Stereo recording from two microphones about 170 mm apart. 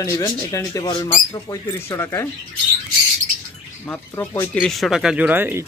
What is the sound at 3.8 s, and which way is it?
Speech, 15° left (ahead or behind).